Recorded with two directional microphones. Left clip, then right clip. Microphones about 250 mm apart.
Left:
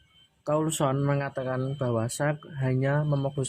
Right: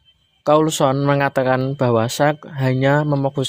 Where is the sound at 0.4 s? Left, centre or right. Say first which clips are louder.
Right 12 dB; right.